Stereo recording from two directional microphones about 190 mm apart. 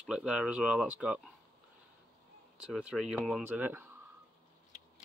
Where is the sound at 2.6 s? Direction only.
5° right (ahead or behind).